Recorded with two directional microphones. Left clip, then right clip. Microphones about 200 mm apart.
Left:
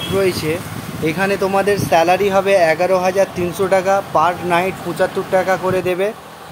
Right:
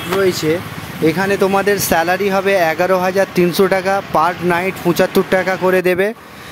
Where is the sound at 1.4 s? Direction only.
45° right (ahead or behind).